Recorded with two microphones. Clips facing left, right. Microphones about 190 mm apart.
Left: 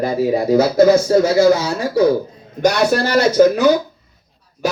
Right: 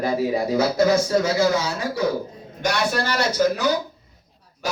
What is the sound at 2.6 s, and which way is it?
Speech, 40° left (ahead or behind).